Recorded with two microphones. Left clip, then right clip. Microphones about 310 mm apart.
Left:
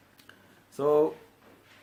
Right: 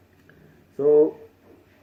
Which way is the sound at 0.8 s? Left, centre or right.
Left.